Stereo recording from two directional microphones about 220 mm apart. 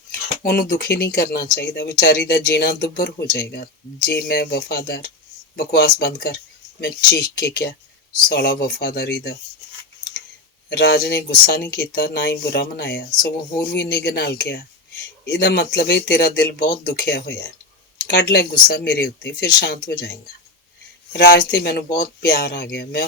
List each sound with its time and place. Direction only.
0.4 s speech: 45° left (ahead or behind)
10.7 s speech: 50° left (ahead or behind)
21.1 s speech: 45° left (ahead or behind)